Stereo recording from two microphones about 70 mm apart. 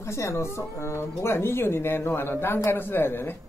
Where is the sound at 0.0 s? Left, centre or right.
Left.